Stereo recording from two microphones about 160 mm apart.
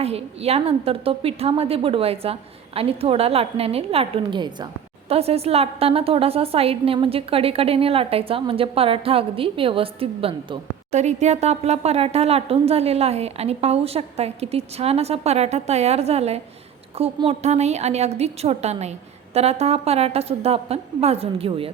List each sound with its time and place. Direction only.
0.0 s a woman's voice: 40° right (ahead or behind)